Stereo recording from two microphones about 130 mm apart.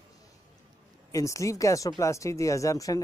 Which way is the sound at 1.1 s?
25° left (ahead or behind).